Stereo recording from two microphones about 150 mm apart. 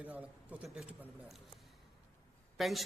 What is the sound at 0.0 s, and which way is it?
A man's voice, 10° right (ahead or behind).